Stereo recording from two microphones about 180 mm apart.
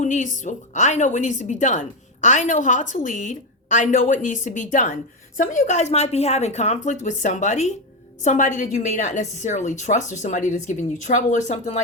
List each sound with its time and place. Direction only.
0.0 s a woman's voice: 45° left (ahead or behind)